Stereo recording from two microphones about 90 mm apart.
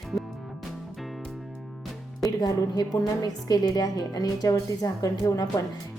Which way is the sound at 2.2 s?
45° left (ahead or behind).